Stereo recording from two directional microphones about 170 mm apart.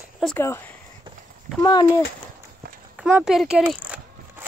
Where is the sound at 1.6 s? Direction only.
25° left (ahead or behind).